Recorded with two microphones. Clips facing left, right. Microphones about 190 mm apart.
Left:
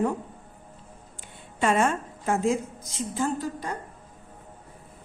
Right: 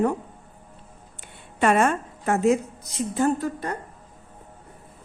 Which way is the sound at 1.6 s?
65° right (ahead or behind).